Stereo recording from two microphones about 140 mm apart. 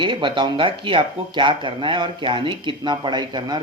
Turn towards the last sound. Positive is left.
turn(degrees=-30)  # may be behind; listen again after turning